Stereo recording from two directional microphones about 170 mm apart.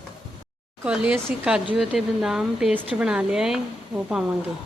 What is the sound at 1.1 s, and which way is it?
Speech, 5° right (ahead or behind).